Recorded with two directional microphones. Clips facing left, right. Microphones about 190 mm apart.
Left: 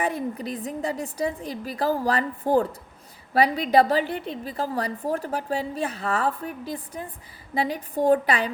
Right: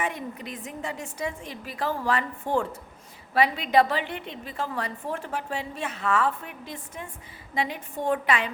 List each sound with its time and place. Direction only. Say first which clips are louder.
0.0 s a woman's voice: left 5 dB; 35° left (ahead or behind)